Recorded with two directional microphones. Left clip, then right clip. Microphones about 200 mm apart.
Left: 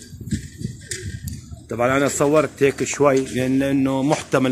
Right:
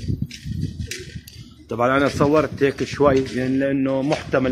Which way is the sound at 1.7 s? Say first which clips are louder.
Even; 5° left (ahead or behind).